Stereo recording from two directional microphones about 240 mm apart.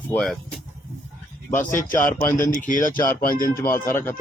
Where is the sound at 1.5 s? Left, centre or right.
Left.